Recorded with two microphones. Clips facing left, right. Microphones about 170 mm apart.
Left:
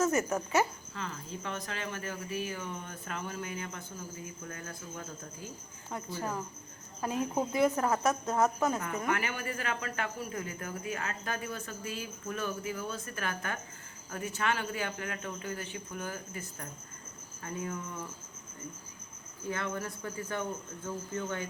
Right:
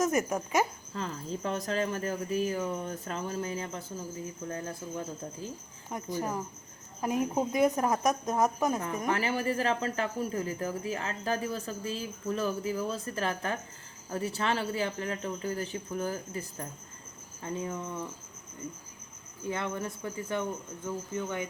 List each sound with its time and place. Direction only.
0.0 s speech: 15° right (ahead or behind)
0.9 s speech: 35° right (ahead or behind)
4.4 s cricket: 30° right (ahead or behind)
5.9 s speech: 15° right (ahead or behind)
9.0 s speech: 35° right (ahead or behind)
17.4 s cricket: 25° right (ahead or behind)
19.5 s cricket: 20° right (ahead or behind)
20.8 s speech: 15° right (ahead or behind)